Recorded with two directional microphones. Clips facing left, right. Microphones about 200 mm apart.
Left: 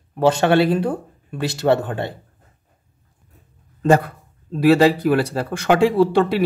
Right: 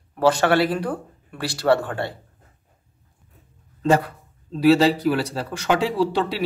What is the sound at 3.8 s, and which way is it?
Speech, 50° left (ahead or behind).